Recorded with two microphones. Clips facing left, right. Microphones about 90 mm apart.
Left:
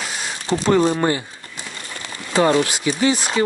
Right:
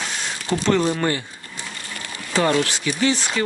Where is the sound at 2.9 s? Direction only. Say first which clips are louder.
Left 2 dB; 20° left (ahead or behind).